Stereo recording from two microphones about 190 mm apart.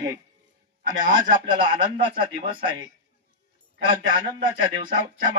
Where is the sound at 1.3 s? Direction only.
25° right (ahead or behind).